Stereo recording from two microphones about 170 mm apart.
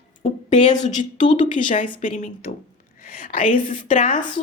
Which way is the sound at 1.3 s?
50° left (ahead or behind).